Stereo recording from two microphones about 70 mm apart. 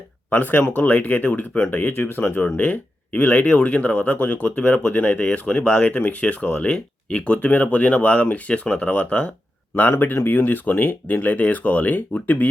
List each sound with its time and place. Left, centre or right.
0.3 s speech: left
1.7 s speech: left
9.9 s speech: left